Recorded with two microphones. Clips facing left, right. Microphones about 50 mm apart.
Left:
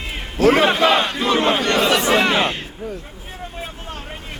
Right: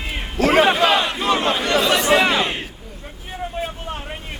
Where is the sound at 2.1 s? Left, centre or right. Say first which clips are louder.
Right 4 dB; centre.